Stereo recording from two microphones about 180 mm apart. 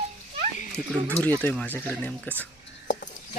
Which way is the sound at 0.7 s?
5° left (ahead or behind).